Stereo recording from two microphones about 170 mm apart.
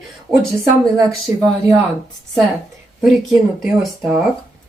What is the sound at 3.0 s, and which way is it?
Speech, centre (ahead or behind).